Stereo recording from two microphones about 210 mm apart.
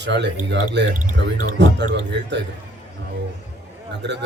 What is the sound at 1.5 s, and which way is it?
Speech, 55° right (ahead or behind).